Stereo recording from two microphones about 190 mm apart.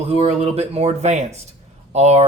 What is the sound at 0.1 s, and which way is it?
Speech, 30° right (ahead or behind).